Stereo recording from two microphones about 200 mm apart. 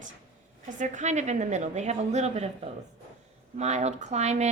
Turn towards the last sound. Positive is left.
turn(degrees=-35)  # may be behind; listen again after turning